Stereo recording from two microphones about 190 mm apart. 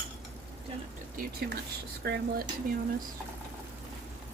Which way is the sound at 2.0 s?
55° right (ahead or behind).